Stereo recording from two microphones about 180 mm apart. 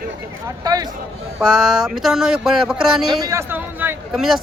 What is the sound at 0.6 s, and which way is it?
Speech, 20° right (ahead or behind).